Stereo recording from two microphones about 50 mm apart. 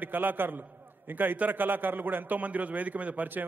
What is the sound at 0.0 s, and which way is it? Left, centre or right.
A man's voice, right.